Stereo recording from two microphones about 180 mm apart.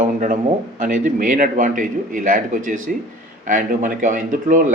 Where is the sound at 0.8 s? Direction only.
45° right (ahead or behind).